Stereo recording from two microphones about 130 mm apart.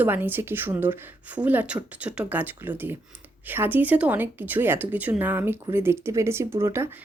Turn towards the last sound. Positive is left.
turn(degrees=-20)  # may be behind; listen again after turning